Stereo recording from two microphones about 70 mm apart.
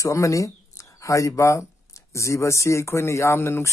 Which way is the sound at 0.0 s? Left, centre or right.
Left.